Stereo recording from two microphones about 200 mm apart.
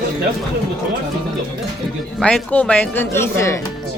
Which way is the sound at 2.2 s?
5° left (ahead or behind).